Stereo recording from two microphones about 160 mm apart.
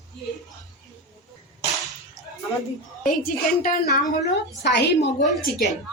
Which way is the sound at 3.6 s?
65° left (ahead or behind).